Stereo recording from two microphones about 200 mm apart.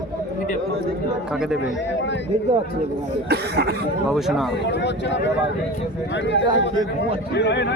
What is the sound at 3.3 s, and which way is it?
Speech, 55° right (ahead or behind).